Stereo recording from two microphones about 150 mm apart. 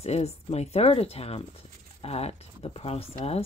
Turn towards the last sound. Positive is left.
turn(degrees=40)  # may be behind; listen again after turning